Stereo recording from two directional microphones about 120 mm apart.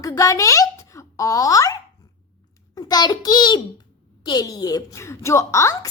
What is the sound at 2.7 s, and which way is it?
A child's voice, 35° left (ahead or behind).